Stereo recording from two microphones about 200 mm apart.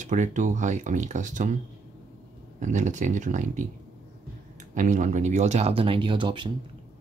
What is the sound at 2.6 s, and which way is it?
Speech, 35° right (ahead or behind).